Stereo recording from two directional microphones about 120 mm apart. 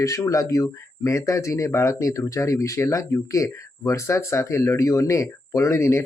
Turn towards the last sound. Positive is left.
turn(degrees=25)  # may be behind; listen again after turning